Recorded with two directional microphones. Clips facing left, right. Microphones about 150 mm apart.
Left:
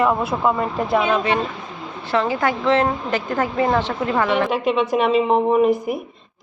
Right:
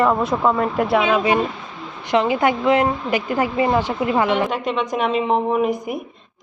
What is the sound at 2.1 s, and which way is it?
A woman's voice, 20° right (ahead or behind).